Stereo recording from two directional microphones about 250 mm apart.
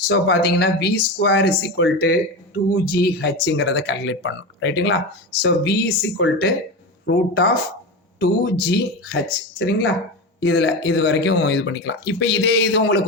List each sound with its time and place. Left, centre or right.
0.1 s speech: left